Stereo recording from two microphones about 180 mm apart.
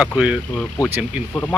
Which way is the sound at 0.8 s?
20° left (ahead or behind).